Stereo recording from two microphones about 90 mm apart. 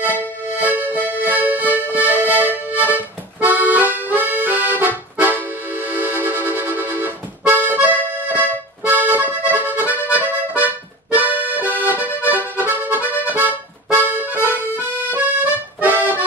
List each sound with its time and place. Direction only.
0.6 s accordion: 20° right (ahead or behind)